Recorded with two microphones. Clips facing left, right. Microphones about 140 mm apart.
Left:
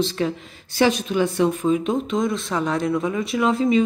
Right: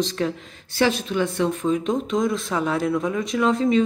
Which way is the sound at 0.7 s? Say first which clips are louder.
Left 2 dB; 15° left (ahead or behind).